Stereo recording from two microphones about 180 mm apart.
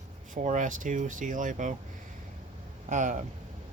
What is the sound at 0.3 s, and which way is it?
Speech, 45° right (ahead or behind).